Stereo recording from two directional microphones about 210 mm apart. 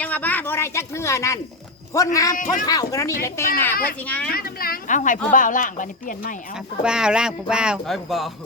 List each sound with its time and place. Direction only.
0.0 s speech: 5° left (ahead or behind)
2.3 s speech: 40° left (ahead or behind)
2.6 s speech: 15° left (ahead or behind)
4.3 s speech: 45° left (ahead or behind)
6.8 s speech: 5° right (ahead or behind)